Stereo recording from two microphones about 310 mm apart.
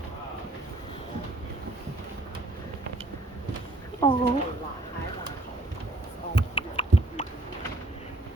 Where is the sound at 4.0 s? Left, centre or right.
Centre.